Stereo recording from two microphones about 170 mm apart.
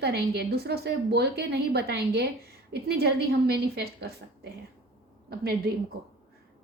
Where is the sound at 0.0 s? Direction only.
70° right (ahead or behind).